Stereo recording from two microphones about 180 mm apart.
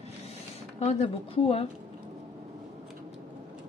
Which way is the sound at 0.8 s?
35° left (ahead or behind).